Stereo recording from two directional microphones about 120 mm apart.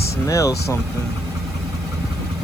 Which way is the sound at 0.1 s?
25° left (ahead or behind).